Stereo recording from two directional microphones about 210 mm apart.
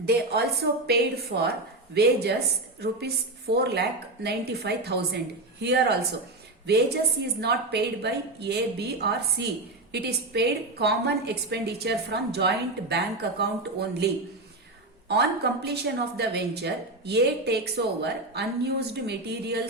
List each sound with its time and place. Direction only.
0.0 s a woman's voice: 50° right (ahead or behind)